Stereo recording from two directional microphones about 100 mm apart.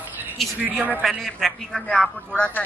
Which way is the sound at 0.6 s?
15° right (ahead or behind).